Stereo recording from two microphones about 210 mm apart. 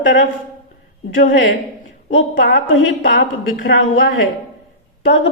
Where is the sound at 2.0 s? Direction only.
55° left (ahead or behind).